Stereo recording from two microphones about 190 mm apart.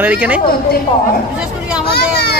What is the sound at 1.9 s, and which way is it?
Vehicle, 55° left (ahead or behind).